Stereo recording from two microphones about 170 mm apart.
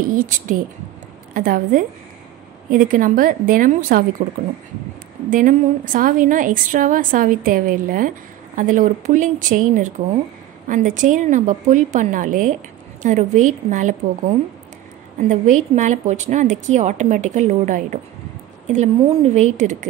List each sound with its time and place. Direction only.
0.1 s a woman's voice: 55° right (ahead or behind)